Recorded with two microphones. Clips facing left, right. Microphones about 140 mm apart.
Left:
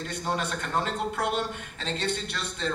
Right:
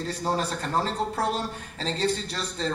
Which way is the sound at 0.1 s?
35° right (ahead or behind).